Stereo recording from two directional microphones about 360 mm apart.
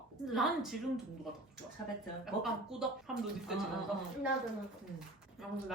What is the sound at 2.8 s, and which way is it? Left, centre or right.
Speech, centre.